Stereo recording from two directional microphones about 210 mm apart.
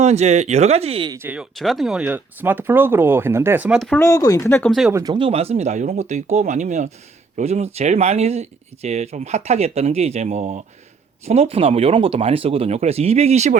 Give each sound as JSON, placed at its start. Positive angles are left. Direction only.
{"t": 0.0, "sound": "speech", "side_deg": -30}
{"t": 4.7, "sound": "speech", "side_deg": 0}
{"t": 4.9, "sound": "speech", "side_deg": -20}